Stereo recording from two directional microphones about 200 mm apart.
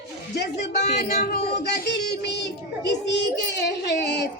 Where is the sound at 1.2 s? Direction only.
50° left (ahead or behind).